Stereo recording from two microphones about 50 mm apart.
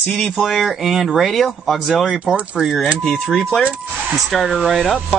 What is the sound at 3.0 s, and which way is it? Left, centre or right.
Speech, centre.